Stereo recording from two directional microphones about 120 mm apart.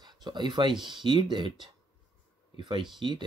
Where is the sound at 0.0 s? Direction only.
35° right (ahead or behind).